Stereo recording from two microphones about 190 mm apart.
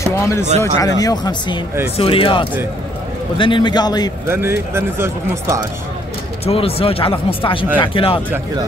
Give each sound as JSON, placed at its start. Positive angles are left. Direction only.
{"t": 0.0, "sound": "speech", "side_deg": 15}
{"t": 4.3, "sound": "speech", "side_deg": -10}
{"t": 6.4, "sound": "speech", "side_deg": 30}